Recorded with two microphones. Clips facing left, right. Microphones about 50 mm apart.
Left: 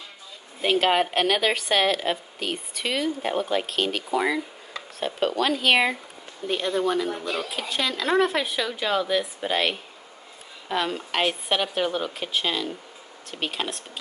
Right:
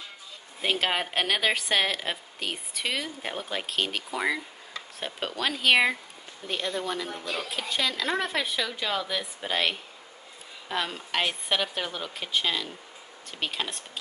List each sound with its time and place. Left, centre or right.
0.6 s speech: centre